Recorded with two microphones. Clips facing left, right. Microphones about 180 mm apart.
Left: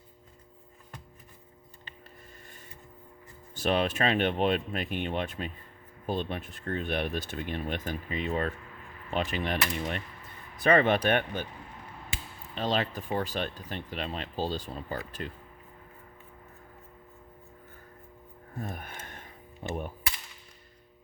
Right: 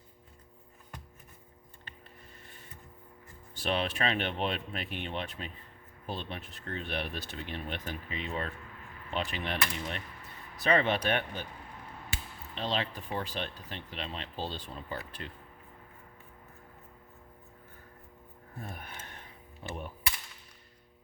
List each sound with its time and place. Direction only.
3.5 s speech: 45° left (ahead or behind)
12.5 s speech: 45° left (ahead or behind)
18.6 s speech: 45° left (ahead or behind)